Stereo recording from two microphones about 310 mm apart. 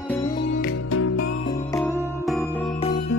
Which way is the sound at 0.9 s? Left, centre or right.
Left.